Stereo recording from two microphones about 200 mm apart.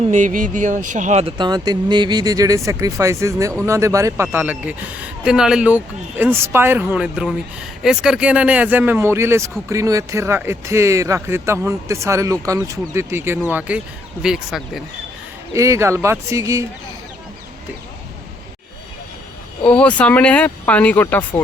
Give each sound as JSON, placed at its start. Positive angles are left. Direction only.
{"t": 0.1, "sound": "speech", "side_deg": -40}
{"t": 15.5, "sound": "speech", "side_deg": -15}
{"t": 19.6, "sound": "speech", "side_deg": 5}